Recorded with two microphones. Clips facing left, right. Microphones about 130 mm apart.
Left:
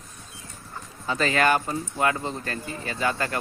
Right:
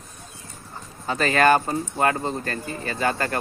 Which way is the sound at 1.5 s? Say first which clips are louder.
Right 4 dB; 45° right (ahead or behind).